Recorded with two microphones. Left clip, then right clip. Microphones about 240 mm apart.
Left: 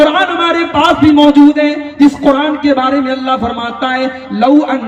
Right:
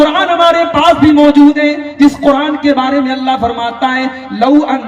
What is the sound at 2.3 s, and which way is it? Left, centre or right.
A man's voice, right.